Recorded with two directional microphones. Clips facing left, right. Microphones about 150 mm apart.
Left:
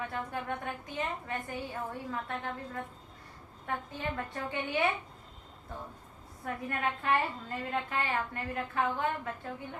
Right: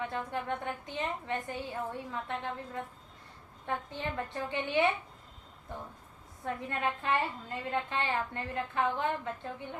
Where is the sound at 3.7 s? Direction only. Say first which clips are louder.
Even; 25° right (ahead or behind).